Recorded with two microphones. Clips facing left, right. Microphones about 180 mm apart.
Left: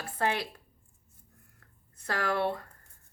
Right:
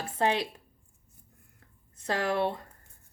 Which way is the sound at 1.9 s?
20° right (ahead or behind).